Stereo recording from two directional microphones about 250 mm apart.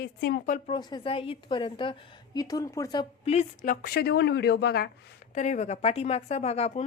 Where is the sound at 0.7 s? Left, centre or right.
Centre; by 4.9 s left.